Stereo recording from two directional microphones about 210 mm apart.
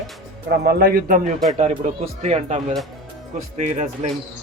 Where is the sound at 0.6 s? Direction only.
50° right (ahead or behind).